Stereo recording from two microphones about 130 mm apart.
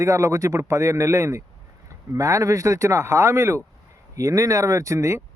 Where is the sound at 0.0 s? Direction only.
25° right (ahead or behind).